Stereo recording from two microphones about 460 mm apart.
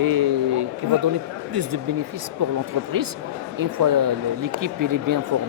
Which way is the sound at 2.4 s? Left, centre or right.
Right.